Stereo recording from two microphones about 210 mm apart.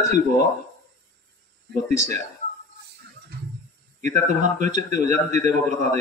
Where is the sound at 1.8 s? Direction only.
35° right (ahead or behind).